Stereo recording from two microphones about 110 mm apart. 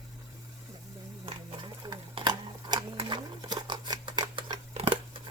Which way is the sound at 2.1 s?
45° right (ahead or behind).